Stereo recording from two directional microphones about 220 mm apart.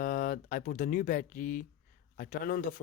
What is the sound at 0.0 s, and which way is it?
Speech, 40° left (ahead or behind).